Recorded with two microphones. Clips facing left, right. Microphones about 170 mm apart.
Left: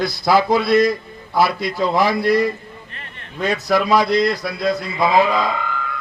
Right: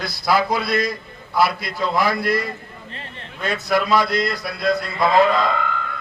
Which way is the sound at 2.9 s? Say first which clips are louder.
Right 3 dB; 30° right (ahead or behind).